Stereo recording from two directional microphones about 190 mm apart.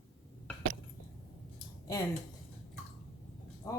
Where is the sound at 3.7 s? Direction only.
15° left (ahead or behind).